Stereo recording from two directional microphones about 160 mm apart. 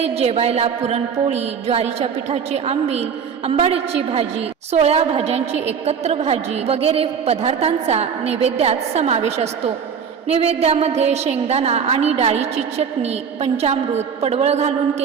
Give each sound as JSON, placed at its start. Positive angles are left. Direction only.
{"t": 0.0, "sound": "music", "side_deg": -40}